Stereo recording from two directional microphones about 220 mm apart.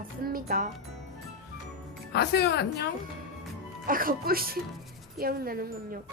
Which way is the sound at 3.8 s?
40° right (ahead or behind).